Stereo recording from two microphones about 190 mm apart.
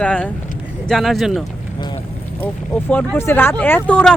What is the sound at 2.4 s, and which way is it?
Speech, 10° left (ahead or behind).